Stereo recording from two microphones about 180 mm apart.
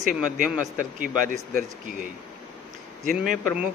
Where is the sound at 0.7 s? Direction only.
50° right (ahead or behind).